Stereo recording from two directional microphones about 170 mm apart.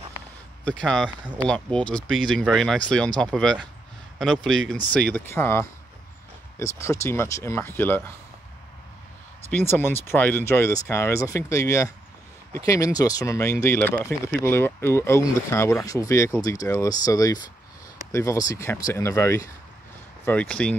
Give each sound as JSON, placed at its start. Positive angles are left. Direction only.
{"t": 0.7, "sound": "speech", "side_deg": 5}
{"t": 9.5, "sound": "speech", "side_deg": 10}
{"t": 20.2, "sound": "speech", "side_deg": 5}